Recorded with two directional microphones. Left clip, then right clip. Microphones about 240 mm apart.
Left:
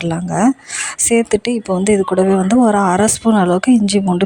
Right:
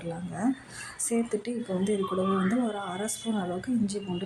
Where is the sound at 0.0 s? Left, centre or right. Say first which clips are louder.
Left 16 dB; left.